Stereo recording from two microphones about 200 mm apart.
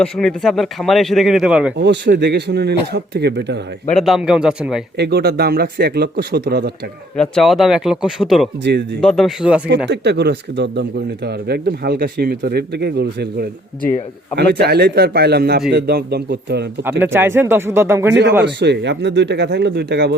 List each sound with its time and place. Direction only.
0.0 s speech: 5° left (ahead or behind)
1.7 s a man's voice: 60° right (ahead or behind)
3.8 s speech: centre (ahead or behind)
4.9 s a man's voice: 55° right (ahead or behind)
7.2 s speech: centre (ahead or behind)
8.6 s a man's voice: 55° right (ahead or behind)
9.0 s speech: centre (ahead or behind)
9.9 s a man's voice: 55° right (ahead or behind)
17.0 s speech: 10° right (ahead or behind)
18.1 s a man's voice: 60° right (ahead or behind)